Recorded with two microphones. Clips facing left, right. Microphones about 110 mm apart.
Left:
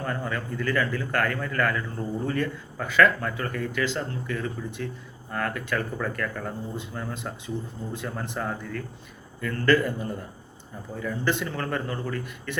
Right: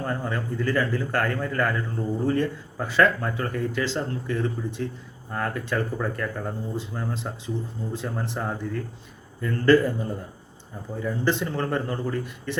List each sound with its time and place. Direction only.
0.0 s speech: 25° right (ahead or behind)